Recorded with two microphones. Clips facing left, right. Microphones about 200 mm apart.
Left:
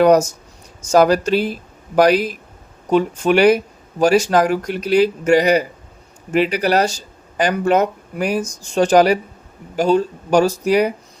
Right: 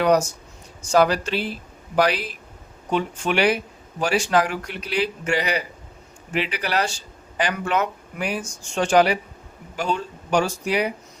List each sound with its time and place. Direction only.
0.0 s speech: 45° left (ahead or behind)